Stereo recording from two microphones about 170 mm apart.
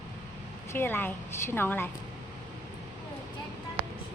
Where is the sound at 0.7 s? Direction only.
15° left (ahead or behind).